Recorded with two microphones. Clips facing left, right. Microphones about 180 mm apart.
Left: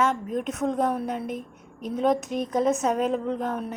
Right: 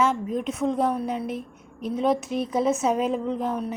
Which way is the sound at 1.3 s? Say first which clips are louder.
Right 1 dB; 40° left (ahead or behind).